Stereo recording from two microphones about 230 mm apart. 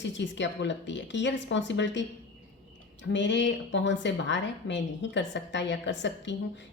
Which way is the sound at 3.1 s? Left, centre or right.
Left.